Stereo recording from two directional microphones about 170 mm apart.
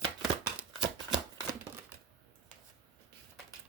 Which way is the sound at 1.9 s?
10° right (ahead or behind).